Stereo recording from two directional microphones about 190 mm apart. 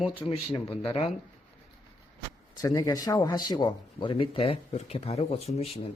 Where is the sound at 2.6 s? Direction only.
20° left (ahead or behind).